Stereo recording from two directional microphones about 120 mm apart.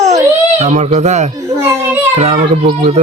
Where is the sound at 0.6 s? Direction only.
70° right (ahead or behind).